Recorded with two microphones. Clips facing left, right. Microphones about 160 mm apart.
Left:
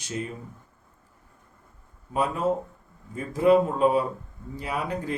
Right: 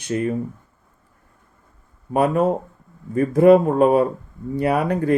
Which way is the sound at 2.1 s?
60° right (ahead or behind).